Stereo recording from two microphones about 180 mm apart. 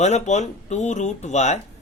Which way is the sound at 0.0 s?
40° left (ahead or behind).